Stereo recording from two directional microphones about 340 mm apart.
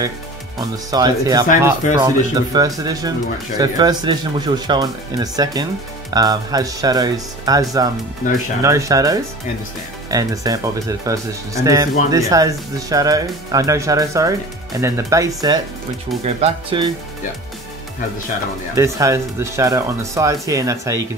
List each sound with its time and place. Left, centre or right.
0.6 s speech: centre
8.2 s speech: left
8.6 s speech: centre
18.8 s speech: centre